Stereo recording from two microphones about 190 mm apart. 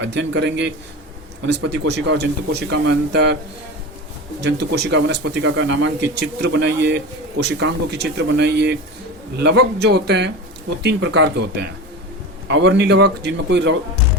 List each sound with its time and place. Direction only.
0.0 s speech: 65° right (ahead or behind)
4.4 s speech: 65° right (ahead or behind)
6.1 s speech: 60° right (ahead or behind)